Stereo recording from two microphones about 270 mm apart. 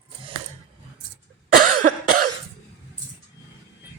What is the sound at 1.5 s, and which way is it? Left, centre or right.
Cough, right.